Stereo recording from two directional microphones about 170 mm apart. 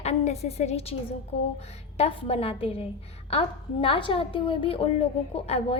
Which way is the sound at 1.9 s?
35° left (ahead or behind).